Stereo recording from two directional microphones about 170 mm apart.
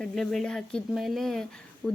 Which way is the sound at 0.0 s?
Centre (ahead or behind).